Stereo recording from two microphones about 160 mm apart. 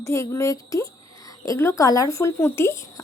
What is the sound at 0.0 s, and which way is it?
A woman's voice, 20° left (ahead or behind).